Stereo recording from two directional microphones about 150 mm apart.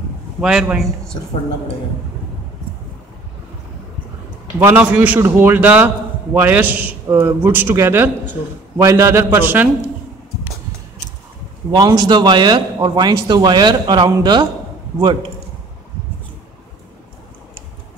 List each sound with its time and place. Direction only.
0.4 s a man's voice: 5° right (ahead or behind)
4.6 s a man's voice: 15° right (ahead or behind)
11.7 s speech: 25° right (ahead or behind)